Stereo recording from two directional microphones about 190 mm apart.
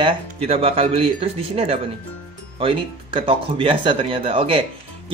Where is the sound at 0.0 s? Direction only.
30° right (ahead or behind).